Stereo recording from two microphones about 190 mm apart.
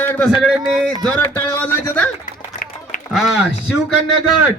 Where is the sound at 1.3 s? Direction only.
10° left (ahead or behind).